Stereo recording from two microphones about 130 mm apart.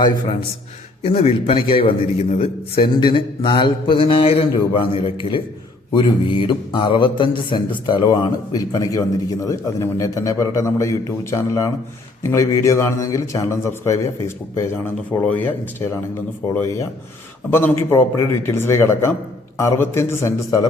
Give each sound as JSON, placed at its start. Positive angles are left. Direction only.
{"t": 1.0, "sound": "a man's voice", "side_deg": 50}
{"t": 15.2, "sound": "a man's voice", "side_deg": 10}